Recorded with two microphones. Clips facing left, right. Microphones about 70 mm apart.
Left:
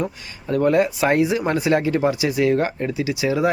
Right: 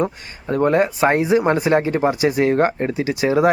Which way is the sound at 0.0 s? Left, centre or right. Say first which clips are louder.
Right 4 dB; right.